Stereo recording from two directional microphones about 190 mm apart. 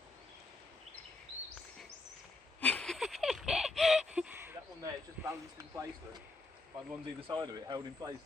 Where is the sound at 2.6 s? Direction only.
5° left (ahead or behind).